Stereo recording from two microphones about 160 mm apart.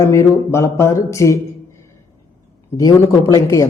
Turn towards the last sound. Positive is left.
turn(degrees=20)  # may be behind; listen again after turning